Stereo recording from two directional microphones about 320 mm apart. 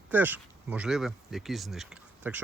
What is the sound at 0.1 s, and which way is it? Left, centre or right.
Speech, centre.